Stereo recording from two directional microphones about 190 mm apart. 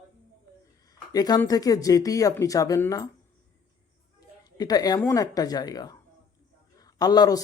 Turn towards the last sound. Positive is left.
turn(degrees=20)  # may be behind; listen again after turning